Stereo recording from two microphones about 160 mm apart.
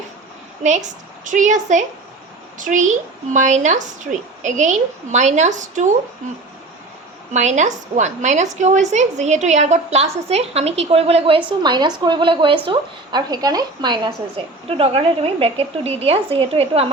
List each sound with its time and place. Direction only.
0.6 s a woman's voice: 50° right (ahead or behind)
7.3 s a woman's voice: 45° right (ahead or behind)